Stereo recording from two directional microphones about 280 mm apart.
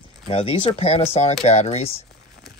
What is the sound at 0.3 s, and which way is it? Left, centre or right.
Speech, left.